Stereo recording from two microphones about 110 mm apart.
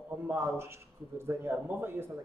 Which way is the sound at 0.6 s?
25° right (ahead or behind).